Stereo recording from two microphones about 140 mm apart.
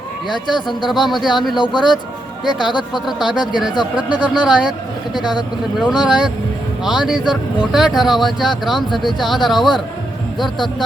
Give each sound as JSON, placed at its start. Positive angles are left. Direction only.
{"t": 0.3, "sound": "speech", "side_deg": 35}
{"t": 0.9, "sound": "speech", "side_deg": 0}
{"t": 1.5, "sound": "speech", "side_deg": 35}
{"t": 2.4, "sound": "speech", "side_deg": 0}
{"t": 5.2, "sound": "speech", "side_deg": 30}
{"t": 6.0, "sound": "speech", "side_deg": -5}